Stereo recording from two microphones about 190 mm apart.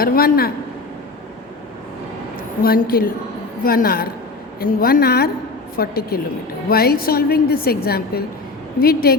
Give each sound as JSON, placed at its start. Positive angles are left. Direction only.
{"t": 0.0, "sound": "a woman's voice", "side_deg": 50}
{"t": 2.6, "sound": "a woman's voice", "side_deg": 50}